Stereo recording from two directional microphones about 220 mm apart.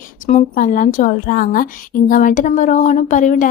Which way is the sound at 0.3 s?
35° left (ahead or behind).